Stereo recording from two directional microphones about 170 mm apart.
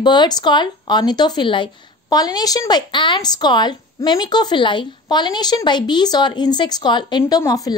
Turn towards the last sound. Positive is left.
turn(degrees=20)  # may be behind; listen again after turning